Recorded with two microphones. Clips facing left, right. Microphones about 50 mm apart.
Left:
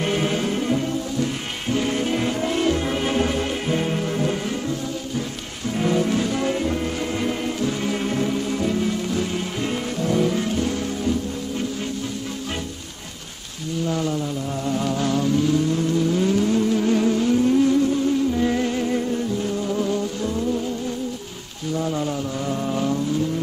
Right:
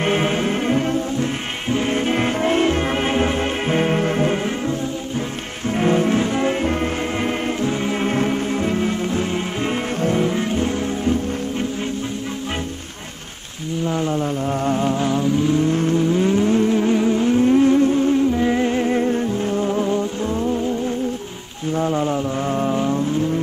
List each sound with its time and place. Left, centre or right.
0.0 s music: right
5.8 s music: right
13.8 s music: right
15.0 s vehicle: centre
18.3 s music: right
21.7 s a sound: right